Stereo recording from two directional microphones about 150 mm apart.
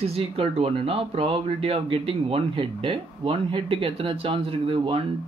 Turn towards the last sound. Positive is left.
turn(degrees=-35)  # may be behind; listen again after turning